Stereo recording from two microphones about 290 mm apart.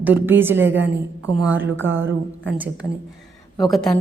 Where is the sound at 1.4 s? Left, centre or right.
Centre.